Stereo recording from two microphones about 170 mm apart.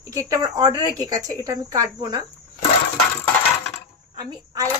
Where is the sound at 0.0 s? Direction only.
20° right (ahead or behind).